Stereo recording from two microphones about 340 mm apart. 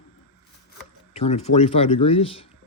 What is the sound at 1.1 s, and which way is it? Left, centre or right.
Speech, centre.